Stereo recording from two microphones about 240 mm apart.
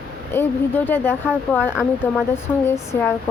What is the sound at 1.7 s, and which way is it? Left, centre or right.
Speech, centre.